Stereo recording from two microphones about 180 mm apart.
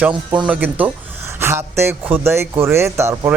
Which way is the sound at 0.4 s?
10° right (ahead or behind).